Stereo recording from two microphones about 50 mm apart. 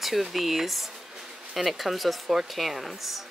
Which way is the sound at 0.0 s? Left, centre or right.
Centre.